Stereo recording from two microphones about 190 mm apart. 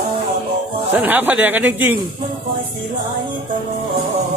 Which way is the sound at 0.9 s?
10° right (ahead or behind).